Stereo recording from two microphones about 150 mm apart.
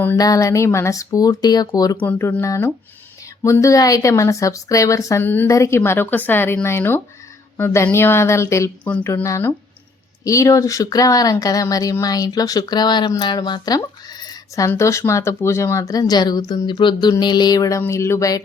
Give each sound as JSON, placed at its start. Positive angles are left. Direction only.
{"t": 0.2, "sound": "speech", "side_deg": 20}
{"t": 2.0, "sound": "speech", "side_deg": 15}
{"t": 8.8, "sound": "speech", "side_deg": 10}